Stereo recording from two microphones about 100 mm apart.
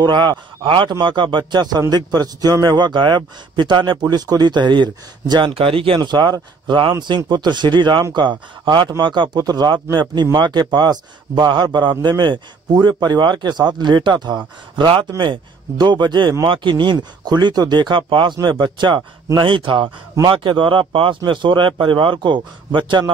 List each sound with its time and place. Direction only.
0.0 s a man's voice: 50° right (ahead or behind)
5.9 s a man's voice: 45° right (ahead or behind)